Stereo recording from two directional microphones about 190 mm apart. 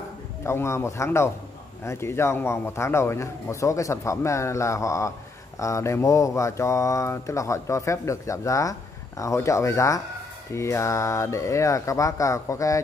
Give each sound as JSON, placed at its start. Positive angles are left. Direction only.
{"t": 0.4, "sound": "speech", "side_deg": 15}